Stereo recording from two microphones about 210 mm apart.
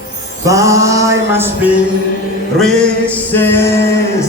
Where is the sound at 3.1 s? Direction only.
10° left (ahead or behind).